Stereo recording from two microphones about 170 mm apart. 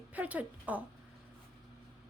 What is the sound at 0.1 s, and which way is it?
Speech, 10° right (ahead or behind).